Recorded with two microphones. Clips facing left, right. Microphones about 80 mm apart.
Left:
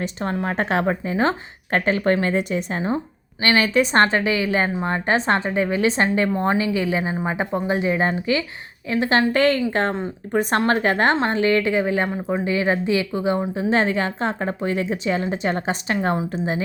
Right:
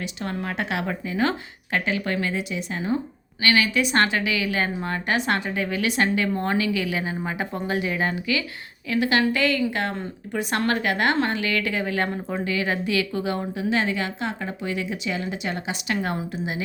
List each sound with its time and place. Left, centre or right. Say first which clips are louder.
0.0 s a woman's voice: left 5 dB; left
12.0 s speech: left 4 dB; centre
12.5 s a woman's voice: left 5 dB; left